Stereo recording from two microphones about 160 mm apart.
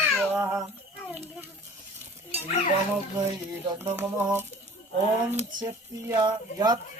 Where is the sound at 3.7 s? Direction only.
15° right (ahead or behind).